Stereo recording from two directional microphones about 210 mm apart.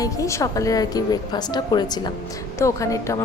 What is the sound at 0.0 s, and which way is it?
Speech, 15° left (ahead or behind).